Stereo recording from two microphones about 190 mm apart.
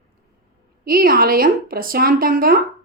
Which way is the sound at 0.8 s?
50° right (ahead or behind).